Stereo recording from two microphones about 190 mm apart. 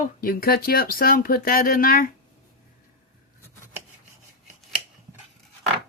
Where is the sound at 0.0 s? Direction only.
50° left (ahead or behind).